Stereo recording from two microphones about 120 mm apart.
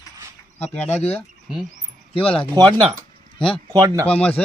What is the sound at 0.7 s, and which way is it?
Speech, 15° left (ahead or behind).